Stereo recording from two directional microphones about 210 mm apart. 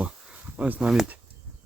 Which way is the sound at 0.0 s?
5° right (ahead or behind).